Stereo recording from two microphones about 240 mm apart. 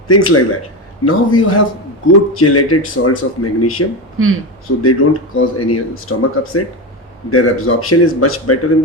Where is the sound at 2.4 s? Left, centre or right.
Left.